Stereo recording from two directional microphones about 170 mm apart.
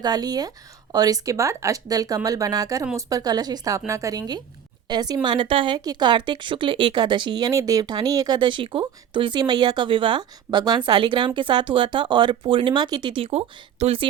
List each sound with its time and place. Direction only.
0.0 s a woman's voice: 25° right (ahead or behind)